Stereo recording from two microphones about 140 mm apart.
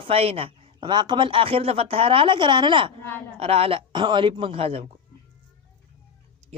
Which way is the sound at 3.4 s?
45° right (ahead or behind).